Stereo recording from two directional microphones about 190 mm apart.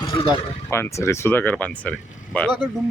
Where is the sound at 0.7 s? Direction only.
15° left (ahead or behind).